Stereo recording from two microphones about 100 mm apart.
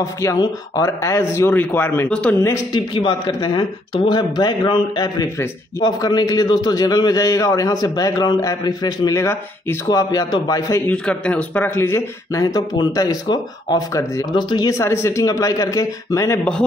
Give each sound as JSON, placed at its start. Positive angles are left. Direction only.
{"t": 0.0, "sound": "a man's voice", "side_deg": 30}
{"t": 2.7, "sound": "a man's voice", "side_deg": 50}
{"t": 9.8, "sound": "a man's voice", "side_deg": 40}
{"t": 10.9, "sound": "a man's voice", "side_deg": 15}
{"t": 14.3, "sound": "speech", "side_deg": 50}
{"t": 14.7, "sound": "a man's voice", "side_deg": 30}